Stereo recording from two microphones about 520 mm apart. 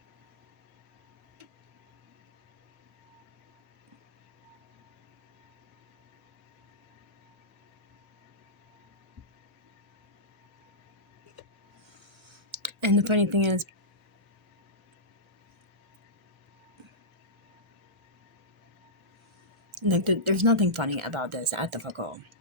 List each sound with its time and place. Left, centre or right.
12.3 s speech: right
19.9 s speech: right